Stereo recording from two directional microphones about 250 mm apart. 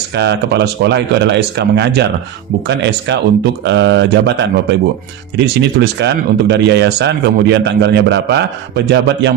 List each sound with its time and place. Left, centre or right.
0.2 s a man's voice: right